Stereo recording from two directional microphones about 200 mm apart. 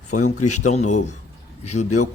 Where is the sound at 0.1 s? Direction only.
35° left (ahead or behind).